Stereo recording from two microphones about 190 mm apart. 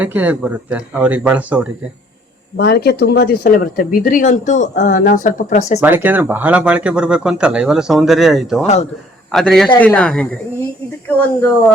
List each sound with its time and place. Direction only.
0.0 s speech: 10° right (ahead or behind)
2.6 s speech: 55° left (ahead or behind); by 5.8 s 40° left (ahead or behind)
5.8 s speech: 10° right (ahead or behind)
8.6 s speech: 35° left (ahead or behind)
9.3 s speech: centre (ahead or behind)